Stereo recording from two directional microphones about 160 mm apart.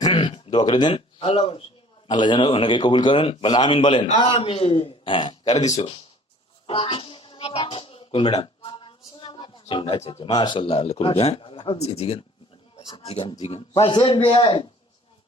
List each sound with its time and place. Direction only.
0.0 s a sound: 30° left (ahead or behind)
2.0 s a man's voice: 30° left (ahead or behind)
6.7 s a man's voice: 35° left (ahead or behind)